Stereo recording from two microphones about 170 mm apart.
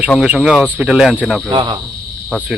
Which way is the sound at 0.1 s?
Centre (ahead or behind).